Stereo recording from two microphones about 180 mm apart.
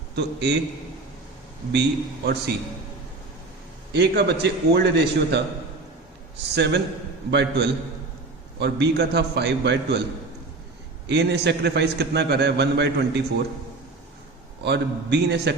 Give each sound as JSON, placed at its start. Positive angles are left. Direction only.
{"t": 0.2, "sound": "a man's voice", "side_deg": -70}
{"t": 1.7, "sound": "a man's voice", "side_deg": -70}
{"t": 3.9, "sound": "a man's voice", "side_deg": -65}
{"t": 6.5, "sound": "a man's voice", "side_deg": -70}
{"t": 11.0, "sound": "a man's voice", "side_deg": -70}
{"t": 14.6, "sound": "a man's voice", "side_deg": -70}